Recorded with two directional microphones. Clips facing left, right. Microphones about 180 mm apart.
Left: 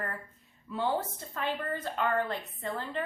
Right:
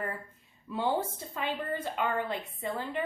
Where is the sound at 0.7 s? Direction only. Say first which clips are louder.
Right 1 dB; 15° right (ahead or behind).